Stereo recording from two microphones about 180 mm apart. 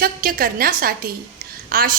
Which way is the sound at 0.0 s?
55° right (ahead or behind).